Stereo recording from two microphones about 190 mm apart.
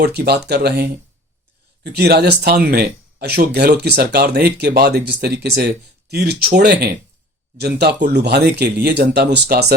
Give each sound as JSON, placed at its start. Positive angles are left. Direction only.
{"t": 0.0, "sound": "speech", "side_deg": -55}